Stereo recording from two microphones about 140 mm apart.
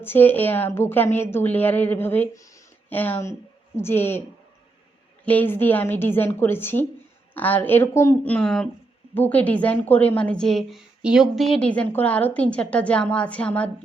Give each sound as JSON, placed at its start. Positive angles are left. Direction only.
{"t": 0.0, "sound": "a woman's voice", "side_deg": 15}
{"t": 5.2, "sound": "a woman's voice", "side_deg": 10}